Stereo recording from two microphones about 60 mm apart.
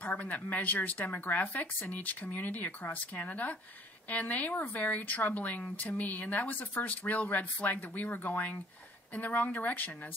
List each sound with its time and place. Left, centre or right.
0.0 s a woman's voice: left